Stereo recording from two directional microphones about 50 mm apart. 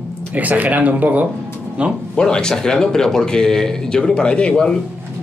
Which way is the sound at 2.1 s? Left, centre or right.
Centre.